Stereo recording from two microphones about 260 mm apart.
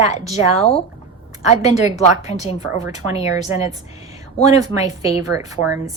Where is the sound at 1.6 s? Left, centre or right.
Left.